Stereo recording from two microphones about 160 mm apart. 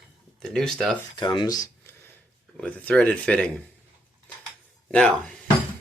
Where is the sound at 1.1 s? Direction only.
30° left (ahead or behind).